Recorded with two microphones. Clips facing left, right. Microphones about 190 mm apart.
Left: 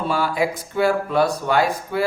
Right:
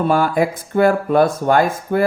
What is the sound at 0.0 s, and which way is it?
Speech, 50° right (ahead or behind).